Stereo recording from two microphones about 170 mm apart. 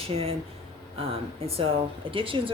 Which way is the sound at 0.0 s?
35° right (ahead or behind).